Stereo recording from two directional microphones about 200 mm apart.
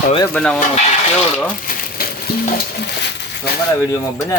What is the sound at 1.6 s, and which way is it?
Stir, 45° left (ahead or behind).